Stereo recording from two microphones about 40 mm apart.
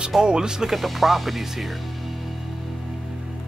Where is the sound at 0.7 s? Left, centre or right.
Centre.